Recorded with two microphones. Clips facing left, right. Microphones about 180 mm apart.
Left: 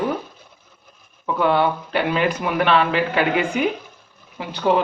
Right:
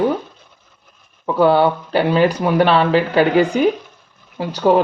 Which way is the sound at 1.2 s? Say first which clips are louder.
Right 5 dB; 35° right (ahead or behind).